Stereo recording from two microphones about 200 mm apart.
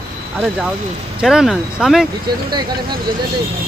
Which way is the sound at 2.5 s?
20° right (ahead or behind).